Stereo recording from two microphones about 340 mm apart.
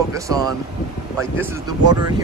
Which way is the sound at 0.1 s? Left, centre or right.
Centre.